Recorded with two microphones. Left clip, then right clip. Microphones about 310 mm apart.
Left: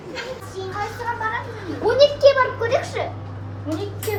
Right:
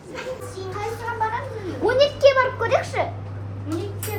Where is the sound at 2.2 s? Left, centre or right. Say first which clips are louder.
Left 1 dB; right.